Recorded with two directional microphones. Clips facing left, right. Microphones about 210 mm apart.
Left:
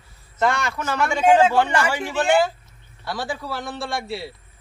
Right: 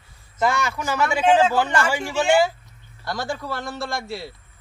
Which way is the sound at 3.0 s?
5° left (ahead or behind).